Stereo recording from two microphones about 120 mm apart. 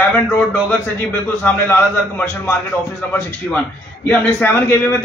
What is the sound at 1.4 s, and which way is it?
A man's voice, 15° left (ahead or behind).